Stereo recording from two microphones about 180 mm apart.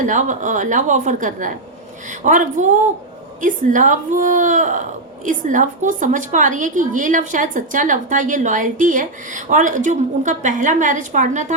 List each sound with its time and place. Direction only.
0.0 s a woman's voice: 45° right (ahead or behind)